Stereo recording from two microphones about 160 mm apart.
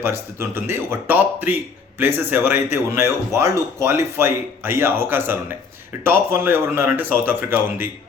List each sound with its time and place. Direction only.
0.0 s speech: 15° right (ahead or behind)